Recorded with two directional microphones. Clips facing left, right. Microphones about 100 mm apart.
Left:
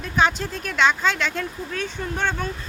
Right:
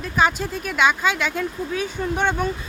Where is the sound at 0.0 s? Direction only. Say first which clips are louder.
Right 1 dB; 5° right (ahead or behind).